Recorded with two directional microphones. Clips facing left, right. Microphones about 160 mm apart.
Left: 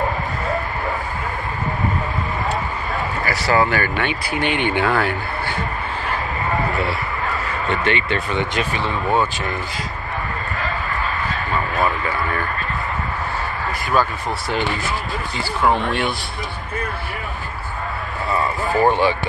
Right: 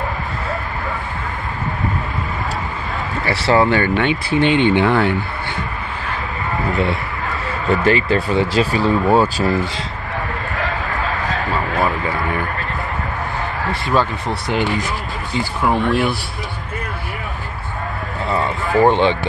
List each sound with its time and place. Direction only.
3.3 s speech: 25° right (ahead or behind)
7.6 s speech: 35° right (ahead or behind)
13.7 s speech: 25° right (ahead or behind)
15.3 s speech: 10° right (ahead or behind)
18.9 s speech: 20° right (ahead or behind)